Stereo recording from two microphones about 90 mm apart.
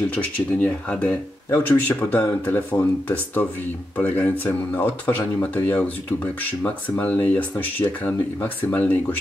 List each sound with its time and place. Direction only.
0.1 s speech: 15° left (ahead or behind)